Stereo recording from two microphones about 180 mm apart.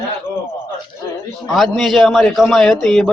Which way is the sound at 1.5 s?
Centre (ahead or behind).